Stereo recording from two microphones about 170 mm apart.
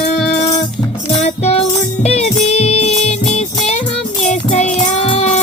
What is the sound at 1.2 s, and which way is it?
Music, 35° left (ahead or behind).